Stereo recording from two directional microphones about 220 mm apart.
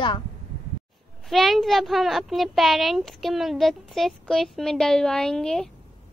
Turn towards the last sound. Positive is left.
turn(degrees=0)  # may be behind; listen again after turning